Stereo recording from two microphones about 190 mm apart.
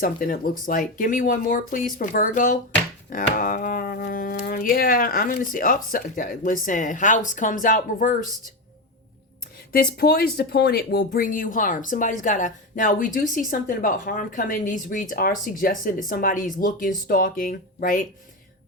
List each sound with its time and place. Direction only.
0.0 s speech: 50° left (ahead or behind)
9.7 s speech: 55° left (ahead or behind)